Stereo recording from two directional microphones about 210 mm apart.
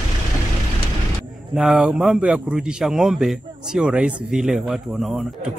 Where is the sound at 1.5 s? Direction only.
5° right (ahead or behind).